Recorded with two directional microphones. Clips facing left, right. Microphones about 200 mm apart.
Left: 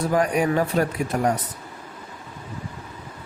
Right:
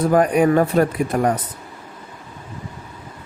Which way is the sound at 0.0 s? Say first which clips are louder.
Right 6 dB; 55° right (ahead or behind).